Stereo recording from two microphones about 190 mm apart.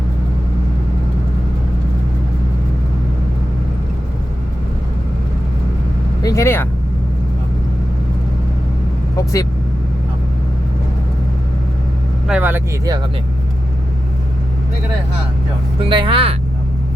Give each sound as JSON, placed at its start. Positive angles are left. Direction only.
{"t": 6.2, "sound": "vehicle", "side_deg": 15}
{"t": 9.1, "sound": "vehicle", "side_deg": 15}
{"t": 12.3, "sound": "vehicle", "side_deg": -10}
{"t": 15.8, "sound": "speech", "side_deg": -25}